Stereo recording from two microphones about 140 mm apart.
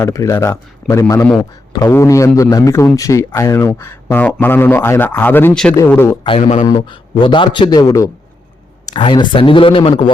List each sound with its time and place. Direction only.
0.0 s a man's voice: 20° left (ahead or behind)
6.2 s speech: 40° left (ahead or behind)